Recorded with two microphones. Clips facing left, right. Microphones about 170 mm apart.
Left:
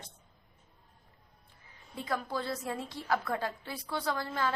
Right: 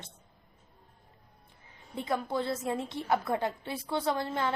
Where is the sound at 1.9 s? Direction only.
25° right (ahead or behind).